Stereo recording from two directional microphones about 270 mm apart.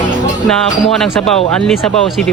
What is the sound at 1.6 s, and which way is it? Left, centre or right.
Speech, centre.